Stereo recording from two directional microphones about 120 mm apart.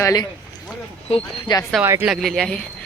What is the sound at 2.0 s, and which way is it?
Speech, centre (ahead or behind).